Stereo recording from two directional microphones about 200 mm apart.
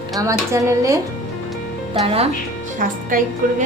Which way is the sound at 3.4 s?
45° right (ahead or behind).